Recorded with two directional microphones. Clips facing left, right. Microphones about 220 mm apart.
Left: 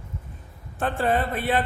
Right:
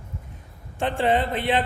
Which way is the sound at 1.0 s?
25° right (ahead or behind).